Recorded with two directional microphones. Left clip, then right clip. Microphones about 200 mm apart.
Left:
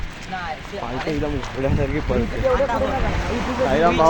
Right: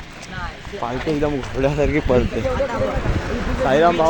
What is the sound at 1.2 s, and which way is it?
Speech, 55° right (ahead or behind).